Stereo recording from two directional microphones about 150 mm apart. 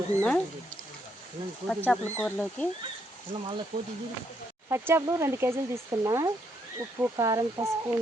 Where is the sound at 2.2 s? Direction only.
10° left (ahead or behind).